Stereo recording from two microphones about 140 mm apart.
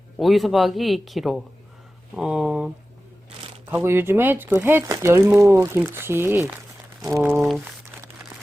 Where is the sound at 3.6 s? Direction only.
15° right (ahead or behind).